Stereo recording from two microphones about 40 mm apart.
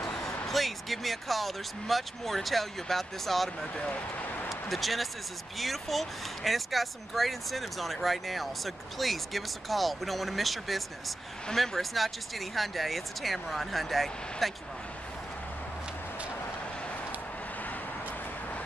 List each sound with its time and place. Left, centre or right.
0.5 s speech: centre
4.5 s speech: centre